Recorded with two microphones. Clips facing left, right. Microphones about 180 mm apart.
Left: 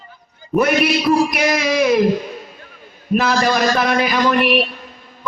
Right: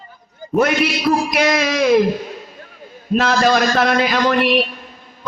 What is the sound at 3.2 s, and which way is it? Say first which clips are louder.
Speech: right 2 dB; 60° right (ahead or behind).